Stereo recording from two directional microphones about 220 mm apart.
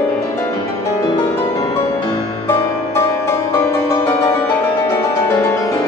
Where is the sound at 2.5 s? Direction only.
10° left (ahead or behind).